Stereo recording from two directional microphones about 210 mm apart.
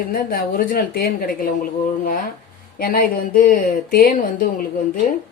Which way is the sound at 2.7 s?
45° left (ahead or behind).